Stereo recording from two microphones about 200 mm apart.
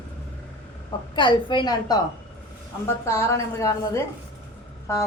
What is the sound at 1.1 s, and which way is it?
Speech, 25° left (ahead or behind).